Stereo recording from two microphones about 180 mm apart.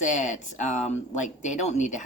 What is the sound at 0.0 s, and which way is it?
A woman's voice, 45° left (ahead or behind).